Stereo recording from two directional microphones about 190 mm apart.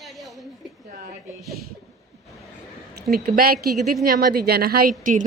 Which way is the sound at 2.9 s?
50° right (ahead or behind).